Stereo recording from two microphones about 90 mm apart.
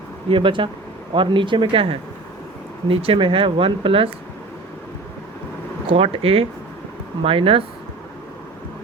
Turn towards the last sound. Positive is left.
turn(degrees=-90)